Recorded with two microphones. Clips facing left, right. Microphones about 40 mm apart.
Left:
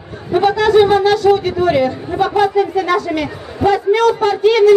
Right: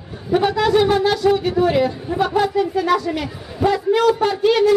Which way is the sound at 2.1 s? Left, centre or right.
Left.